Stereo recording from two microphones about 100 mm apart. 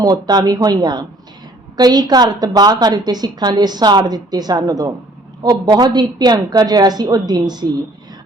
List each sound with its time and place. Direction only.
0.0 s a woman's voice: 40° right (ahead or behind)